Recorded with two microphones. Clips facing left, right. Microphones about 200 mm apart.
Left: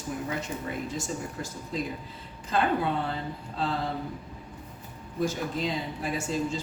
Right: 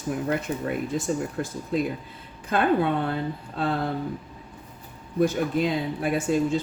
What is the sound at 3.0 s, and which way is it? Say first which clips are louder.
Speech: right 5 dB; 55° right (ahead or behind).